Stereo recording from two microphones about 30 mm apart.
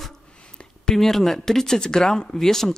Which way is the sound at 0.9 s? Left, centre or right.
Centre.